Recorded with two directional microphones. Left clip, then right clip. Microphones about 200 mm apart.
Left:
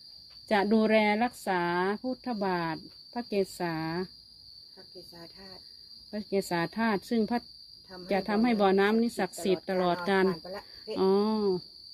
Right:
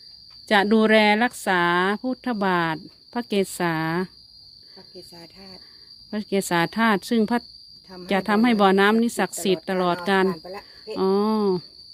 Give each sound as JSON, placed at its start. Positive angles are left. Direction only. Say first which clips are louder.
{"t": 0.4, "sound": "speech", "louder": "right 8 dB", "side_deg": -35}
{"t": 6.1, "sound": "speech", "louder": "right 6 dB", "side_deg": -40}
{"t": 10.2, "sound": "speech", "louder": "right 4 dB", "side_deg": -55}
{"t": 10.9, "sound": "speech", "louder": "right 5 dB", "side_deg": -20}